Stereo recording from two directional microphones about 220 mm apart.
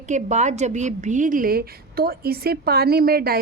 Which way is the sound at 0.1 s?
30° right (ahead or behind).